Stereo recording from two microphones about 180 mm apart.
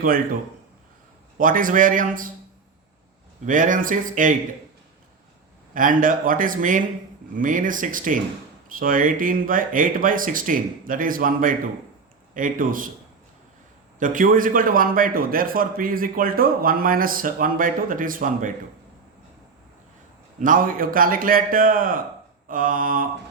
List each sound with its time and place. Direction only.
1.4 s a man's voice: 50° right (ahead or behind)
3.4 s a man's voice: 45° right (ahead or behind)
5.7 s a man's voice: 50° right (ahead or behind)
14.0 s a man's voice: 45° right (ahead or behind)
20.4 s a man's voice: 50° right (ahead or behind)